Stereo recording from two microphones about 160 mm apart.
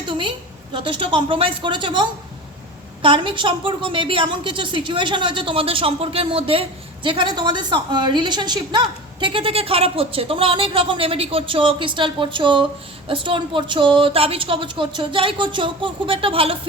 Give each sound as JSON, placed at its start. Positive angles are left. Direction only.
{"t": 0.1, "sound": "a woman's voice", "side_deg": -30}